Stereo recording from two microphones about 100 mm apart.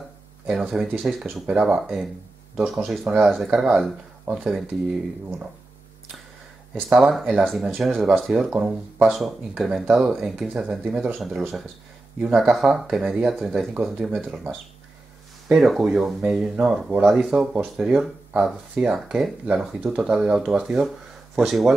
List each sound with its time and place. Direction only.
0.5 s speech: 10° right (ahead or behind)
3.0 s speech: 20° right (ahead or behind)
3.4 s speech: 5° right (ahead or behind)
6.7 s speech: 10° right (ahead or behind)
8.5 s speech: 15° right (ahead or behind)
9.8 s speech: 5° right (ahead or behind)
12.5 s speech: centre (ahead or behind)
15.4 s speech: centre (ahead or behind)